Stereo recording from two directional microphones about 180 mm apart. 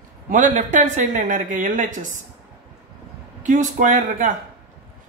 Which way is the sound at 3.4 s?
45° right (ahead or behind).